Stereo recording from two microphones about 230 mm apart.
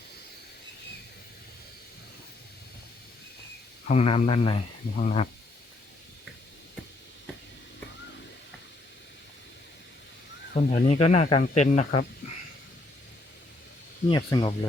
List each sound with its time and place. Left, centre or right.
3.8 s speech: left
10.5 s speech: left
14.1 s speech: centre